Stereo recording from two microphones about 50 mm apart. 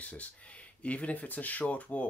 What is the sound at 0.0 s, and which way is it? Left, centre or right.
Speech, left.